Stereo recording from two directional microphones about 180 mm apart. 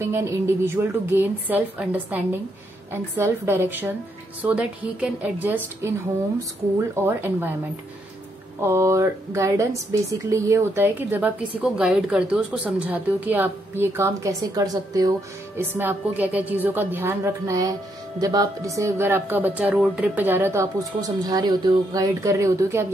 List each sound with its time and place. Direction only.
0.0 s a woman's voice: 15° right (ahead or behind)
7.1 s a woman's voice: 10° right (ahead or behind)
8.5 s a woman's voice: 15° right (ahead or behind)